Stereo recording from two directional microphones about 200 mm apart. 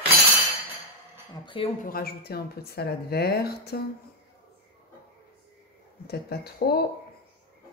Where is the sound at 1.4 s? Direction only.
25° left (ahead or behind).